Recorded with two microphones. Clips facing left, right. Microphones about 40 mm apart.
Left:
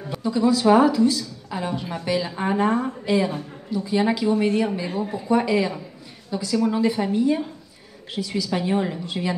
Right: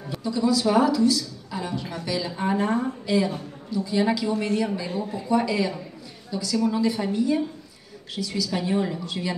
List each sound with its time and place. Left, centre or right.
0.1 s a woman's voice: left